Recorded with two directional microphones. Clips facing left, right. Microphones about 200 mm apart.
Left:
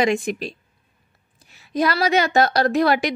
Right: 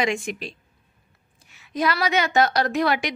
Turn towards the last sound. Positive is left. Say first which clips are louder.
# left 4 dB
turn(degrees=35)  # may be behind; listen again after turning